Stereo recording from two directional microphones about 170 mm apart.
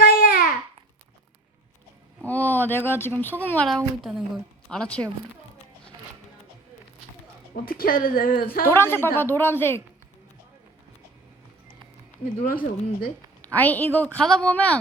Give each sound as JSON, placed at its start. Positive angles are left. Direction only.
{"t": 0.0, "sound": "babbling", "side_deg": 60}
{"t": 2.2, "sound": "a woman's voice", "side_deg": 10}
{"t": 7.5, "sound": "speech", "side_deg": 60}
{"t": 8.6, "sound": "a woman's voice", "side_deg": 15}
{"t": 12.4, "sound": "speech", "side_deg": 55}
{"t": 13.4, "sound": "a woman's voice", "side_deg": 10}